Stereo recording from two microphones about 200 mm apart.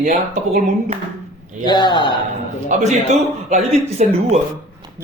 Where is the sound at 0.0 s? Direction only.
40° right (ahead or behind).